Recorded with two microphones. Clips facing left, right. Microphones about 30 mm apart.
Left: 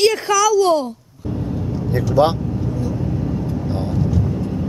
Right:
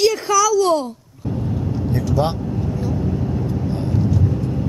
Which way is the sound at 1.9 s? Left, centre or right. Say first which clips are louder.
Left 6 dB; left.